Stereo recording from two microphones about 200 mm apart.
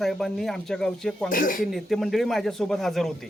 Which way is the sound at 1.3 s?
45° left (ahead or behind).